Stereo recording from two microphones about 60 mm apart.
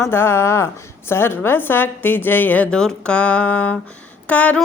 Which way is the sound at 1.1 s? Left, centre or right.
Left.